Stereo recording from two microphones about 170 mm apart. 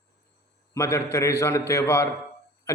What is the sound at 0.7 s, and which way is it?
A man's voice, 15° left (ahead or behind).